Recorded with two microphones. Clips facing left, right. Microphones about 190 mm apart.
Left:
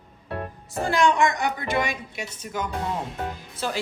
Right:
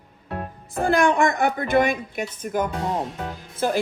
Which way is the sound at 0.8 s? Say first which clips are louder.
Right 2 dB; 55° right (ahead or behind).